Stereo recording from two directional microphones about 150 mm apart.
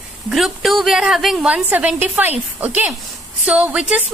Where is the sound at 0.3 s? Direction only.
Centre (ahead or behind).